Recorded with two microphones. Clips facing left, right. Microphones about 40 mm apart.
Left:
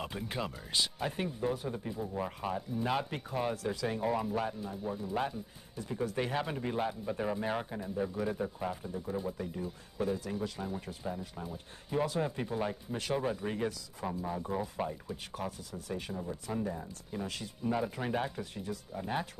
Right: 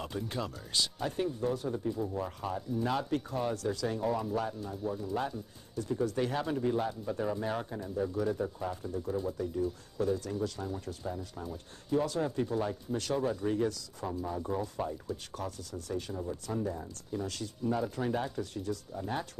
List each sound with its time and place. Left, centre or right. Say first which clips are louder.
0.0 s speech: right 1 dB; centre